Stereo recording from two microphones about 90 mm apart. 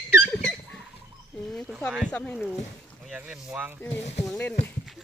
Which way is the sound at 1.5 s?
5° left (ahead or behind).